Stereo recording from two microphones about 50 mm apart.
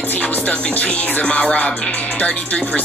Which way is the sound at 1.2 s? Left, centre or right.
Centre.